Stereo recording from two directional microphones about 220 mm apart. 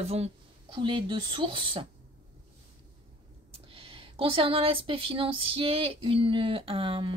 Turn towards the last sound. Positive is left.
turn(degrees=-25)  # may be behind; listen again after turning